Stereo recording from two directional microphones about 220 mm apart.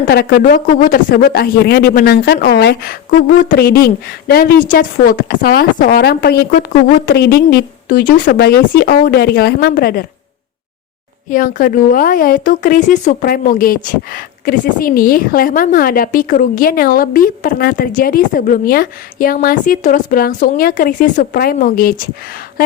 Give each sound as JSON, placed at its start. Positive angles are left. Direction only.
{"t": 0.1, "sound": "a woman's voice", "side_deg": 45}
{"t": 11.3, "sound": "a woman's voice", "side_deg": 40}